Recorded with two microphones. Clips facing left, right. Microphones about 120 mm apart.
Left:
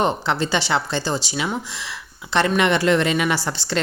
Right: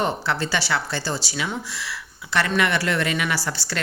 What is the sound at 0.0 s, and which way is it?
A woman's voice, 20° left (ahead or behind).